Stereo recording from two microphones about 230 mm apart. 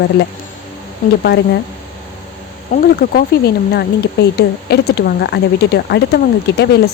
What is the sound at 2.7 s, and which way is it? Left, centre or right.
Speech, left.